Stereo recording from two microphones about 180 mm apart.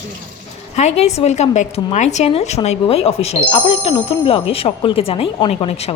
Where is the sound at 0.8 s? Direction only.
40° left (ahead or behind).